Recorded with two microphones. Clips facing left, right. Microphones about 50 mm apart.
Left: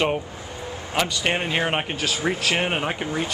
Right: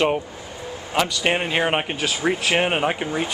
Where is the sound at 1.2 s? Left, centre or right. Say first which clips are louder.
Right 2 dB; centre.